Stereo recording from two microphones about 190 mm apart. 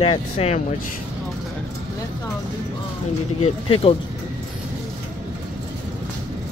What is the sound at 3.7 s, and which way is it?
Speech, 30° left (ahead or behind).